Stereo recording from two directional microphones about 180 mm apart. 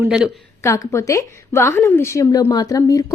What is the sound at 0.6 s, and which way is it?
A woman's voice, 15° left (ahead or behind).